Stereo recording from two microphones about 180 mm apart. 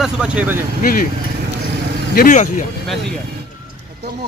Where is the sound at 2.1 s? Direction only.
45° left (ahead or behind).